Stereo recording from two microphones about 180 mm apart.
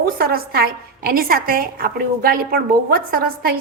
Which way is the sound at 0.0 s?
55° right (ahead or behind).